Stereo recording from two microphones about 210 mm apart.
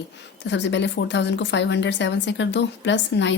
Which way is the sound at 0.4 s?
55° left (ahead or behind).